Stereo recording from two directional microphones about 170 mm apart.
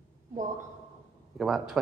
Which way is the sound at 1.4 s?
Centre (ahead or behind).